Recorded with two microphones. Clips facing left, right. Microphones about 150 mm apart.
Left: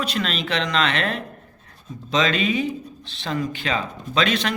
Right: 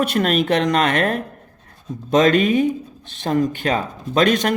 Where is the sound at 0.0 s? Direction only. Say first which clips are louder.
Right 8 dB; 55° right (ahead or behind).